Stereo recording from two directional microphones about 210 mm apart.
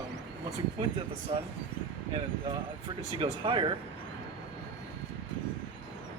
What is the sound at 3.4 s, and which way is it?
Speech, 25° right (ahead or behind).